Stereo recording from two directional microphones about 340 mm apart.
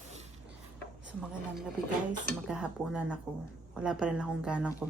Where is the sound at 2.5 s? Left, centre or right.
Centre.